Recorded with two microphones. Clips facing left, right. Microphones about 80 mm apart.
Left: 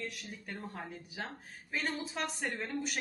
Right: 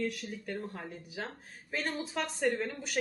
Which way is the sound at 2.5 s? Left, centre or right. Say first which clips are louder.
Right 2 dB; centre.